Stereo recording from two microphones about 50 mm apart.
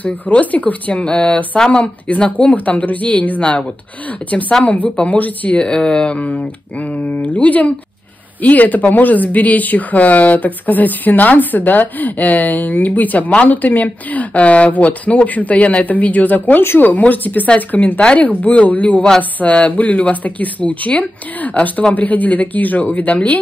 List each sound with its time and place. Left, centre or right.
0.0 s speech: left
5.6 s speech: centre; by 18.0 s left
18.0 s speech: left